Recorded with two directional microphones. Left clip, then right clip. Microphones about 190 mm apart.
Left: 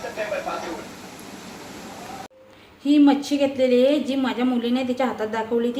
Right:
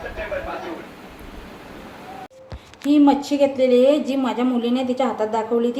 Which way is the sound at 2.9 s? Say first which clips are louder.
Right 1 dB; centre (ahead or behind).